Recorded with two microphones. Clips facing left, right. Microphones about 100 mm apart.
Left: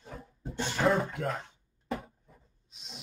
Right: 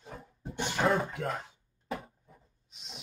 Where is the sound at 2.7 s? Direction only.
Centre (ahead or behind).